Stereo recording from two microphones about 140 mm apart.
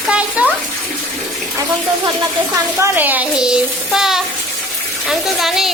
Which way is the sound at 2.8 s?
10° right (ahead or behind).